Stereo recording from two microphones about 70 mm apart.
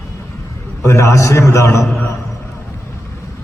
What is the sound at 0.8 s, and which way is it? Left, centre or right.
A man's voice, left.